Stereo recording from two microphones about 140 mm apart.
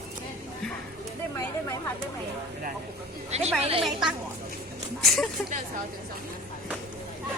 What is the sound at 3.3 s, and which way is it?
Speech, 50° right (ahead or behind).